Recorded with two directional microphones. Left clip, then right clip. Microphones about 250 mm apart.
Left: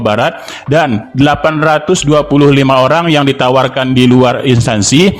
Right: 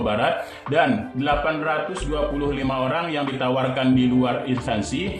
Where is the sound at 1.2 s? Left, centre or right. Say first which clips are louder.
Left 12 dB; left.